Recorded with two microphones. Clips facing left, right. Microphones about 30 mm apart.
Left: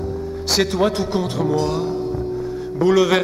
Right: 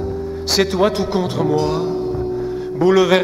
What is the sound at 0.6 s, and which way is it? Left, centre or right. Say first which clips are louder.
Speech: right 3 dB; centre.